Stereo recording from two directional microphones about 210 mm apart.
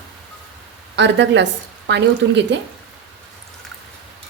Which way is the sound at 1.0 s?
55° right (ahead or behind).